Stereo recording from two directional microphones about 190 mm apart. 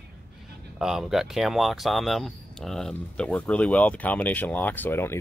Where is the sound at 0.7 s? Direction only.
Centre (ahead or behind).